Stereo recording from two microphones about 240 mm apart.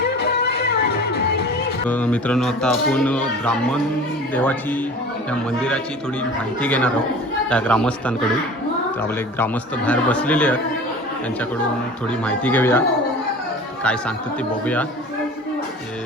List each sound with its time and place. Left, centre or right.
0.2 s music: left
1.9 s speech: centre
12.0 s speech: centre
14.6 s speech: centre